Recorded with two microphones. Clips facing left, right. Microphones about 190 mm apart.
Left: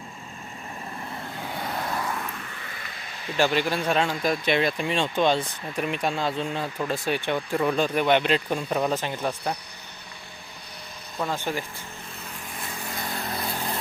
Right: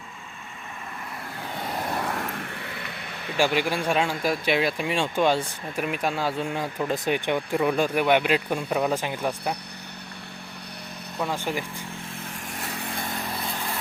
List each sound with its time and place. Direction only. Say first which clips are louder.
2.0 s a sound: right 2 dB; 55° right (ahead or behind)
3.3 s speech: even; 10° right (ahead or behind)
11.2 s speech: even; 10° right (ahead or behind)